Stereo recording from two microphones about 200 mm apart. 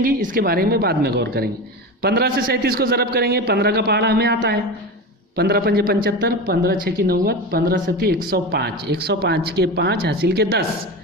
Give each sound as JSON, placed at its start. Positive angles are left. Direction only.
{"t": 0.0, "sound": "speech", "side_deg": -45}